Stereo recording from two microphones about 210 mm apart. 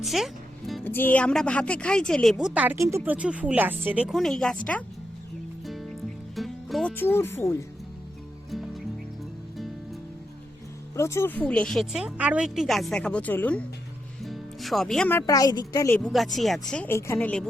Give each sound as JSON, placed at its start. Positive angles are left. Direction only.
{"t": 0.0, "sound": "speech", "side_deg": 0}
{"t": 6.3, "sound": "speech", "side_deg": 0}
{"t": 8.4, "sound": "music", "side_deg": 0}
{"t": 10.9, "sound": "speech", "side_deg": 15}
{"t": 14.3, "sound": "music", "side_deg": 0}
{"t": 15.3, "sound": "a woman's voice", "side_deg": 15}
{"t": 16.0, "sound": "speech", "side_deg": 0}